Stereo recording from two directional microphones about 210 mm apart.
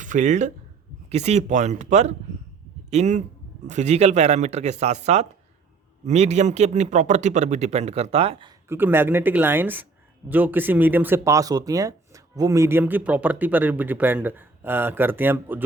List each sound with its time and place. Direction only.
0.0 s speech: 35° right (ahead or behind)
8.7 s speech: 10° right (ahead or behind)